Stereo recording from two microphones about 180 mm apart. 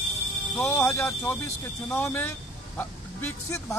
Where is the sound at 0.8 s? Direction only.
15° left (ahead or behind).